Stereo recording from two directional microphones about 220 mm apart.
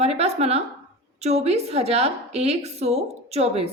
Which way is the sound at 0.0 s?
30° right (ahead or behind).